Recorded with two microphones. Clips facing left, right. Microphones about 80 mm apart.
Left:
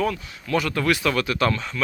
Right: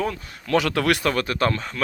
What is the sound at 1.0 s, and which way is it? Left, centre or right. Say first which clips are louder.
Speech: even; right.